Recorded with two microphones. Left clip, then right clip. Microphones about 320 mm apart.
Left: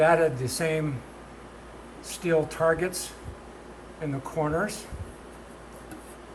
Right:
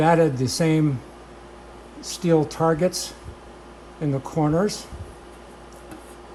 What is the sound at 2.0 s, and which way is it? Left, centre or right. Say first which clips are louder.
Speech: right 4 dB; centre.